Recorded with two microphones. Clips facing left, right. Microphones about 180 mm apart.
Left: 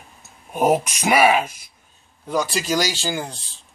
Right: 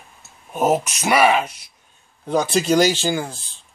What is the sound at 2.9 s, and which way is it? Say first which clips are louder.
Speech: right 4 dB; 15° right (ahead or behind).